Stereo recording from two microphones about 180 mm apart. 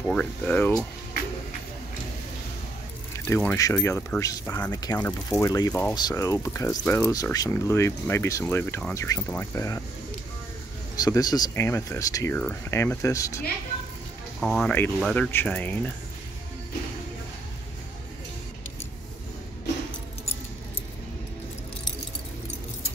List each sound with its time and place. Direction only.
0.0 s speech: 5° left (ahead or behind)
3.3 s speech: 10° left (ahead or behind)
11.0 s speech: 20° left (ahead or behind)
14.4 s speech: centre (ahead or behind)